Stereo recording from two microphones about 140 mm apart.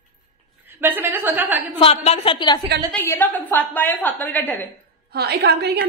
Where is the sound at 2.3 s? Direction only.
30° left (ahead or behind).